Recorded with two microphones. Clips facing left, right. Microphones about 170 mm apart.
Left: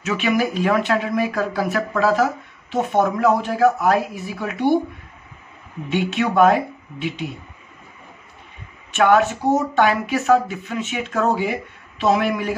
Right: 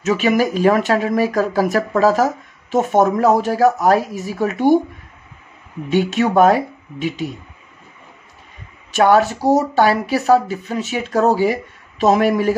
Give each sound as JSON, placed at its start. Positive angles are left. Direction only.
{"t": 0.0, "sound": "speech", "side_deg": -40}
{"t": 5.9, "sound": "speech", "side_deg": -40}
{"t": 8.9, "sound": "speech", "side_deg": -35}